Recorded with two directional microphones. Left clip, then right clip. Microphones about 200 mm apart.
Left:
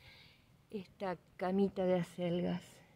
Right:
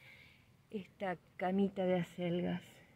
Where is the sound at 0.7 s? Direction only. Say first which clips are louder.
Even; 10° left (ahead or behind).